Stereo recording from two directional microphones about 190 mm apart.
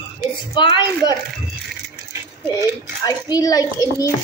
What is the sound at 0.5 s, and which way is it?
Speech, 20° left (ahead or behind).